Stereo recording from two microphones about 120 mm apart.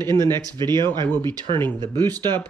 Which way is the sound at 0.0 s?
35° right (ahead or behind).